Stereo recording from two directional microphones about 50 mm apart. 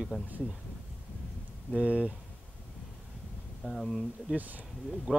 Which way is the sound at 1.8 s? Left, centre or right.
Right.